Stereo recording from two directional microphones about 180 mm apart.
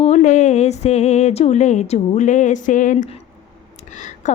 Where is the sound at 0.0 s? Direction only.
40° left (ahead or behind).